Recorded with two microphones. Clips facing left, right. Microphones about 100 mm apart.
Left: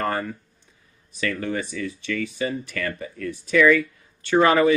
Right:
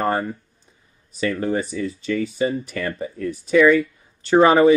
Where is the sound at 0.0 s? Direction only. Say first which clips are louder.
Right 4 dB; 25° right (ahead or behind).